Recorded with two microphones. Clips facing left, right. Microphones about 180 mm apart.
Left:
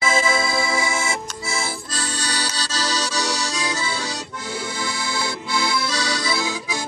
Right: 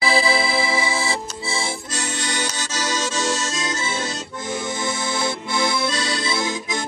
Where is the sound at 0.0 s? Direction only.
35° right (ahead or behind).